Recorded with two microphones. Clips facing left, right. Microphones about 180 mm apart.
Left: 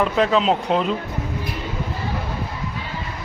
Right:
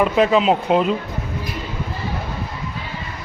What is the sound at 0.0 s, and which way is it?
Speech, 5° right (ahead or behind).